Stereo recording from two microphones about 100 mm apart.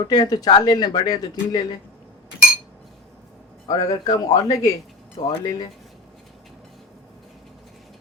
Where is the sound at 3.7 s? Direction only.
40° left (ahead or behind).